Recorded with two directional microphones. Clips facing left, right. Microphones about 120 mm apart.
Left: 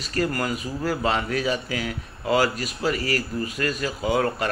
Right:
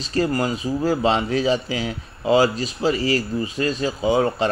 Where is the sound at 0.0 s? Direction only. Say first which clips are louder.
Right 4 dB; 25° right (ahead or behind).